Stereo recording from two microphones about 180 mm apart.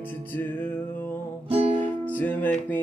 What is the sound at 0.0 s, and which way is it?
Music, 10° left (ahead or behind).